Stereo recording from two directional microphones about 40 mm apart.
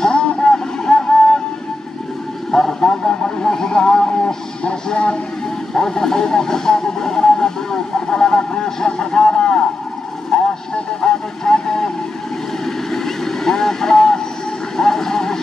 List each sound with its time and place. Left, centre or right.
0.0 s music: left
2.5 s vehicle: centre
12.9 s vehicle: centre